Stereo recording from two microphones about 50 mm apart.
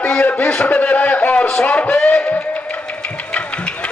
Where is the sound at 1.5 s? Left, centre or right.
Left.